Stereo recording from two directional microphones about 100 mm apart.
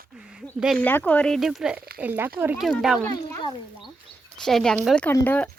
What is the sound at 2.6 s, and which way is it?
Speech, centre (ahead or behind).